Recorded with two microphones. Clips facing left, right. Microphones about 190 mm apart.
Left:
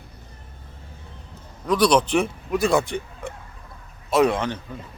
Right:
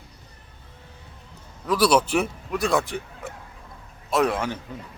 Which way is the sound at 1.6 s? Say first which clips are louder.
Left 1 dB; 5° right (ahead or behind).